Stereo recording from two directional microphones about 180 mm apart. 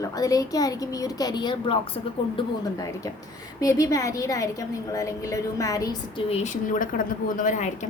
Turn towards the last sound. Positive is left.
turn(degrees=45)  # may be behind; listen again after turning